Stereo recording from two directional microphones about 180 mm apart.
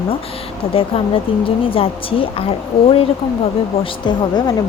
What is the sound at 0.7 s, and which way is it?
Speech, 30° left (ahead or behind).